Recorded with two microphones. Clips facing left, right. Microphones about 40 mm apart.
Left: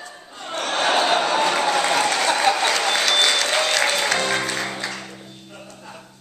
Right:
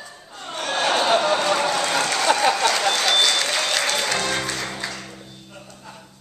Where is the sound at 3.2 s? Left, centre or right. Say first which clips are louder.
Left 1 dB; centre.